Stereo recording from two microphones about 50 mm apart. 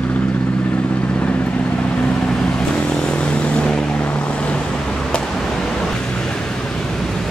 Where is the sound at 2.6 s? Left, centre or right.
Left.